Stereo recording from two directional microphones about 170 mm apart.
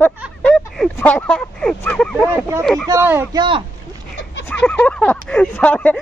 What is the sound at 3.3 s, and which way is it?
Speech, 30° right (ahead or behind).